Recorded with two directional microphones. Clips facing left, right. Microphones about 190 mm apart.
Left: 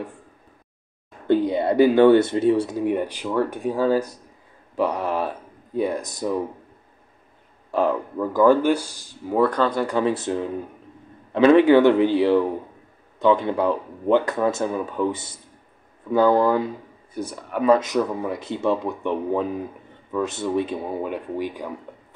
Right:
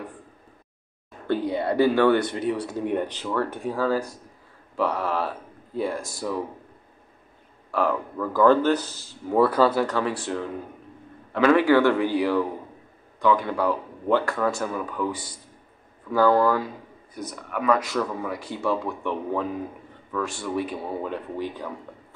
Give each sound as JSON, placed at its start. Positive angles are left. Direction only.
{"t": 1.2, "sound": "speech", "side_deg": 20}
{"t": 2.8, "sound": "speech", "side_deg": 5}
{"t": 7.7, "sound": "speech", "side_deg": 20}
{"t": 9.4, "sound": "speech", "side_deg": -5}
{"t": 9.8, "sound": "speech", "side_deg": 20}